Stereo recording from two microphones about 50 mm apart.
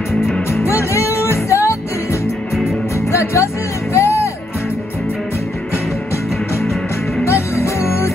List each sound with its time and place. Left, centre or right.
0.5 s music: left
3.1 s music: left
7.2 s music: left